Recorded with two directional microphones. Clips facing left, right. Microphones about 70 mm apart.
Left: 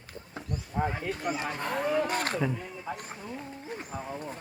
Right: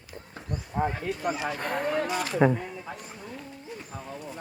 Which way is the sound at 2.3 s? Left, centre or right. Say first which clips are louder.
Right 8 dB; right.